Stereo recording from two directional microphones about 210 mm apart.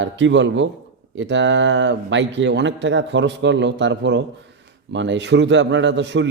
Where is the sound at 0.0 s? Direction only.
60° right (ahead or behind).